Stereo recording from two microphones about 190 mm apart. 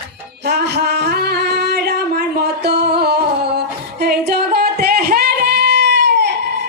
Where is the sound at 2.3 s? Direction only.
60° right (ahead or behind).